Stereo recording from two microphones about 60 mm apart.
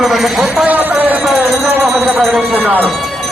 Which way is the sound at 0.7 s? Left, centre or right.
Right.